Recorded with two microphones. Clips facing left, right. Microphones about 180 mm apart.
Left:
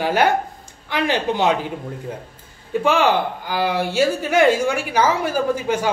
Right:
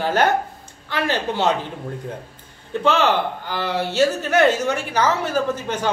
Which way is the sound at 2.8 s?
10° left (ahead or behind).